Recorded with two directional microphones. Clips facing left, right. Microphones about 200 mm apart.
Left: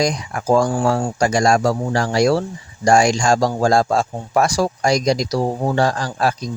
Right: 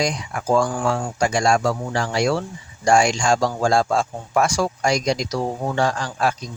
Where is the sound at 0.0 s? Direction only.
40° left (ahead or behind).